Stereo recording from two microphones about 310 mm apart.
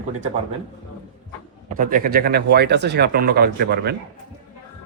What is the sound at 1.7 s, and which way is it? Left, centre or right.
Speech, right.